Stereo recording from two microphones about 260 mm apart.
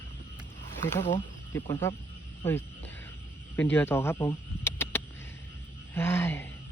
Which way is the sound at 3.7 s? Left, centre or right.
Centre.